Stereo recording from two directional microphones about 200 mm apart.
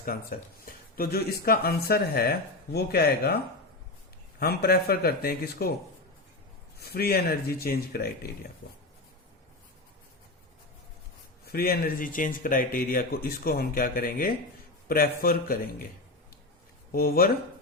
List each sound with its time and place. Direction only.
0.0 s speech: 45° left (ahead or behind)
4.4 s speech: 50° left (ahead or behind)
6.7 s speech: 50° left (ahead or behind)
11.4 s speech: 50° left (ahead or behind)
16.9 s speech: 45° left (ahead or behind)